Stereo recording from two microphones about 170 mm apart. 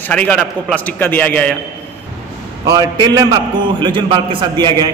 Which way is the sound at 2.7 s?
25° right (ahead or behind).